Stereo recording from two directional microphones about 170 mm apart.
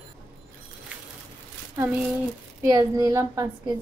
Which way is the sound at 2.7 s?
20° right (ahead or behind).